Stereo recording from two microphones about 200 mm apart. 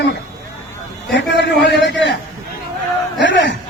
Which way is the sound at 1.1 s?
65° left (ahead or behind).